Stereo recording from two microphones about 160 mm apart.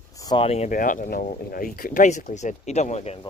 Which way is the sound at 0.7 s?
55° left (ahead or behind).